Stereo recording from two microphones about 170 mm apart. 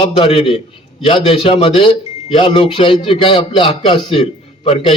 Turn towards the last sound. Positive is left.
turn(degrees=35)  # may be behind; listen again after turning